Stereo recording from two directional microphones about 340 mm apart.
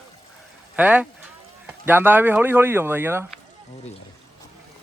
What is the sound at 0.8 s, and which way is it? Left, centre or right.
Speech, centre.